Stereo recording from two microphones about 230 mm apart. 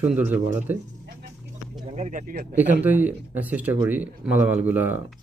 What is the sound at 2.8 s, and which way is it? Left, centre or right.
Speech, centre.